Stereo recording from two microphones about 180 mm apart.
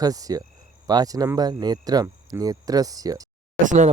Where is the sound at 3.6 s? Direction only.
45° right (ahead or behind).